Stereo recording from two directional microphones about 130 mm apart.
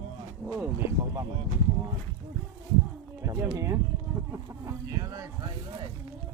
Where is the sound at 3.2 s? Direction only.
25° right (ahead or behind).